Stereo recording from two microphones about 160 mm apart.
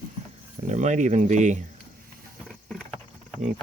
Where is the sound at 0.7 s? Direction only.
50° right (ahead or behind).